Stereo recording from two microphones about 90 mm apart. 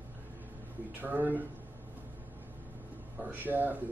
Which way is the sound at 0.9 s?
20° right (ahead or behind).